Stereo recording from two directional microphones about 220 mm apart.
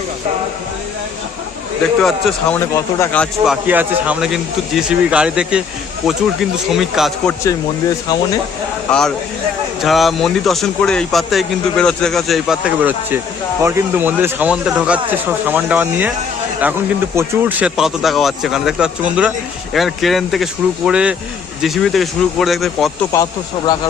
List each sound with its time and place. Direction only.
2.0 s speech: centre (ahead or behind)
7.4 s speech: 15° left (ahead or behind)
8.9 s speech: 5° left (ahead or behind)
17.2 s speech: 10° right (ahead or behind)
23.1 s speech: 15° left (ahead or behind)